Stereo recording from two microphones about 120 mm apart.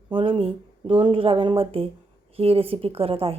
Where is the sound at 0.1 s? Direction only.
45° right (ahead or behind).